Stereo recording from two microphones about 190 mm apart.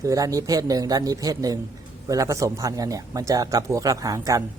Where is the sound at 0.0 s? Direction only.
15° right (ahead or behind).